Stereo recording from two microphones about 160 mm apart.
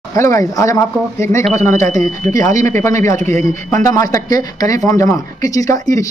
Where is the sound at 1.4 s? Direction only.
45° right (ahead or behind).